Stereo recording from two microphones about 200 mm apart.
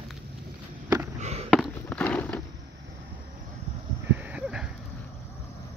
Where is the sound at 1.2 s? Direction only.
30° right (ahead or behind).